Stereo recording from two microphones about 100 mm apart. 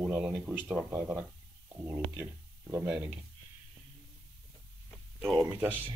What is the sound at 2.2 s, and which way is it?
Speech, 20° right (ahead or behind).